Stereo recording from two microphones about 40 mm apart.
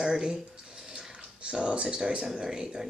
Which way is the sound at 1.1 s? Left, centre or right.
Right.